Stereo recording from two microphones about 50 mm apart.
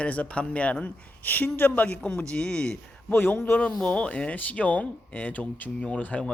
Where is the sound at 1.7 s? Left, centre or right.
Left.